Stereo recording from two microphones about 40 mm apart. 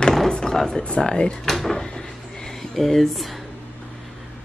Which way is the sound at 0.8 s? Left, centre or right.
Left.